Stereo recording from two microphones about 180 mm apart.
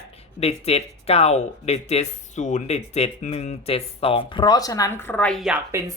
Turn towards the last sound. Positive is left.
turn(degrees=0)  # may be behind; listen again after turning